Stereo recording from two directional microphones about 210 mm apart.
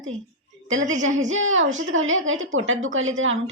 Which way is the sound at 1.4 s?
70° right (ahead or behind).